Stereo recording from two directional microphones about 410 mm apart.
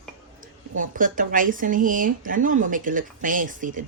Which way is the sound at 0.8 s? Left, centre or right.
Centre.